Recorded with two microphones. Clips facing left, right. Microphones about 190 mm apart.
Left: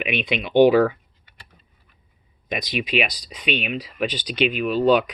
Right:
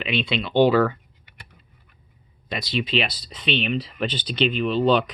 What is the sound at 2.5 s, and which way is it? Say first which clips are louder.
Speech: even; 15° left (ahead or behind).